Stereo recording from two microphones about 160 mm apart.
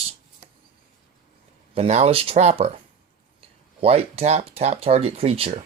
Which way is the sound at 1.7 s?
40° right (ahead or behind).